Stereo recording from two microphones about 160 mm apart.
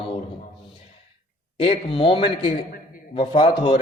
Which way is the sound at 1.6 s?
35° left (ahead or behind).